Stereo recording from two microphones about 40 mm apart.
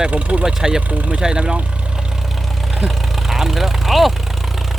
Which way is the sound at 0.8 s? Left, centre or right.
Right.